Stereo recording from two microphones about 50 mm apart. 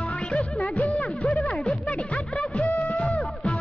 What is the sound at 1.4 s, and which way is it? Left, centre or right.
Music, left.